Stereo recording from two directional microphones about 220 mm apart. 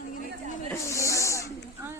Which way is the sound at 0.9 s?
15° left (ahead or behind).